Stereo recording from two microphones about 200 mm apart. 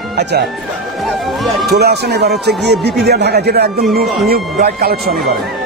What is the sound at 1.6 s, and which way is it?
Speech, 55° right (ahead or behind).